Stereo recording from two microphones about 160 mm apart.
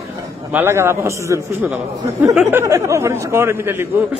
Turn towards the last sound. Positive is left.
turn(degrees=-15)  # may be behind; listen again after turning